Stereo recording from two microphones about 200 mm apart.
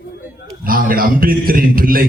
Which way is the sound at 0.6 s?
45° right (ahead or behind).